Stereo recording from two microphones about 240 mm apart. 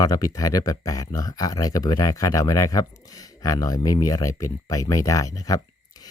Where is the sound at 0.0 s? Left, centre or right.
Centre.